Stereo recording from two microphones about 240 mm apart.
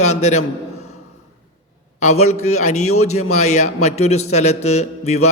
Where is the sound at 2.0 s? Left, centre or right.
Left.